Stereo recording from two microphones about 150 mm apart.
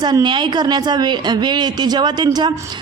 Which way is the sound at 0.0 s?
30° right (ahead or behind).